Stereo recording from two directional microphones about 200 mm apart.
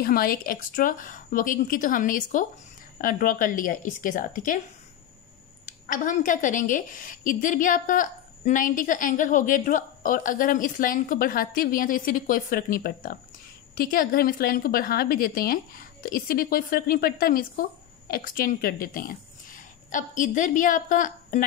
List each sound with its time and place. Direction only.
0.0 s a woman's voice: 45° left (ahead or behind)
5.7 s a woman's voice: 40° left (ahead or behind)